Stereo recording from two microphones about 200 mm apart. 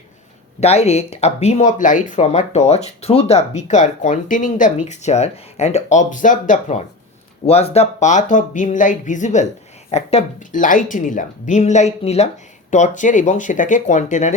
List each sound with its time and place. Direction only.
0.6 s speech: 30° left (ahead or behind)